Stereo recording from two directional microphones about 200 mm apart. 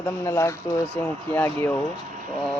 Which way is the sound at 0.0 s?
15° left (ahead or behind).